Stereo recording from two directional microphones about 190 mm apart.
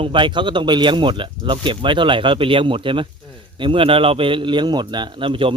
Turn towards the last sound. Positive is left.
turn(degrees=-25)  # may be behind; listen again after turning